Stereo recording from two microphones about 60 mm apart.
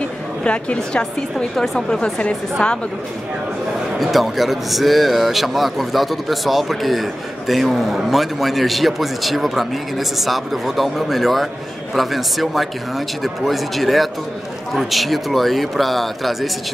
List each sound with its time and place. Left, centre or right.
0.4 s a woman's voice: left
1.6 s a woman's voice: centre
4.0 s a man's voice: centre